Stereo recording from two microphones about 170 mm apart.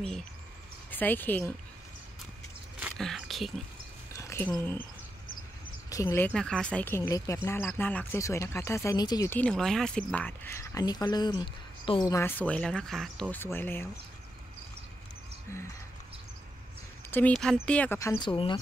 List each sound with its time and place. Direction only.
0.0 s speech: 5° left (ahead or behind)
2.8 s a sound: centre (ahead or behind)
4.1 s a sound: 15° left (ahead or behind)
4.5 s speech: 10° left (ahead or behind)
5.9 s speech: 15° left (ahead or behind)
9.3 s speech: 5° left (ahead or behind); by 12.1 s 30° left (ahead or behind)
12.1 s speech: 15° left (ahead or behind)
17.1 s speech: 5° left (ahead or behind)
17.9 s speech: 20° left (ahead or behind)